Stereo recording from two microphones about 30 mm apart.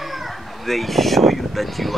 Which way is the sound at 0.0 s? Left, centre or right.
Centre.